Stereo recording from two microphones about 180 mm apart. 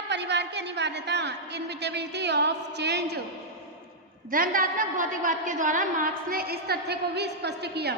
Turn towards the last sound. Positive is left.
turn(degrees=-65)  # may be behind; listen again after turning